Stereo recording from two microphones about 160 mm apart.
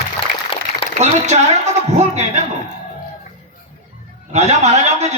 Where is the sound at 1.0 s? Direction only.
45° right (ahead or behind).